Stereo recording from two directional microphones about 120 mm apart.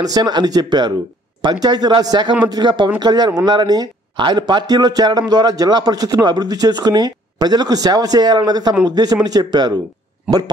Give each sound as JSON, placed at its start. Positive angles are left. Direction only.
{"t": 0.0, "sound": "a man's voice", "side_deg": -35}
{"t": 10.3, "sound": "speech", "side_deg": -10}